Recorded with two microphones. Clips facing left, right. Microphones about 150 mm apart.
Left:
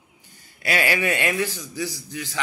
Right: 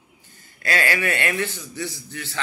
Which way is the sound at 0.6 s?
15° left (ahead or behind).